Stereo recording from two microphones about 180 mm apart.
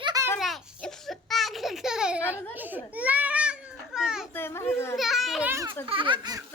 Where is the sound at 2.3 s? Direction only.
10° right (ahead or behind).